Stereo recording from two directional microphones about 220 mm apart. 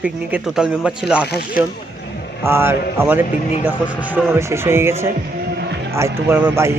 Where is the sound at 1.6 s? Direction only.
40° left (ahead or behind).